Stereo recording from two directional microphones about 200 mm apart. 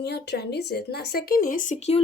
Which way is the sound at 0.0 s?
55° left (ahead or behind).